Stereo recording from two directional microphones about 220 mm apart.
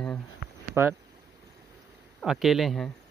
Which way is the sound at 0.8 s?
10° right (ahead or behind).